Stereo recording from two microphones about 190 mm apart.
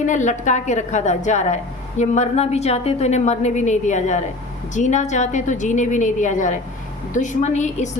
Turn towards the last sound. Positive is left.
turn(degrees=40)  # may be behind; listen again after turning